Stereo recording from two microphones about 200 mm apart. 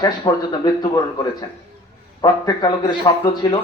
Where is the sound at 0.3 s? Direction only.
20° left (ahead or behind).